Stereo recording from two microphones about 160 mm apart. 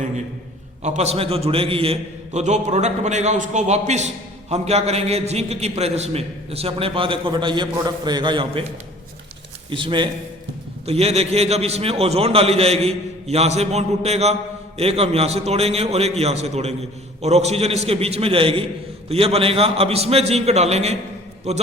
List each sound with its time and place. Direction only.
0.8 s a man's voice: 45° right (ahead or behind); by 8.6 s 30° right (ahead or behind)
9.6 s a man's voice: 30° right (ahead or behind)
10.8 s a man's voice: 40° right (ahead or behind)